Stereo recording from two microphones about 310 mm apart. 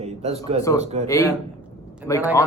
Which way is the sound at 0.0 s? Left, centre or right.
Right.